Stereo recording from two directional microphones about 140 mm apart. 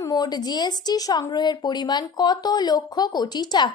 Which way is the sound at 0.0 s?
30° left (ahead or behind).